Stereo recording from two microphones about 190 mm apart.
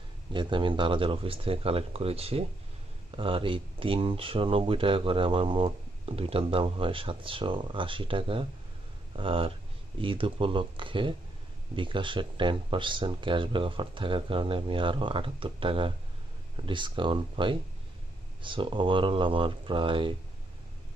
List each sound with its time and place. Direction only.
0.3 s speech: 25° right (ahead or behind)